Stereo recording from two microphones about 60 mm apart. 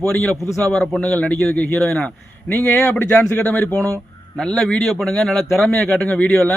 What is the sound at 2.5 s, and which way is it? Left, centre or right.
Speech, left.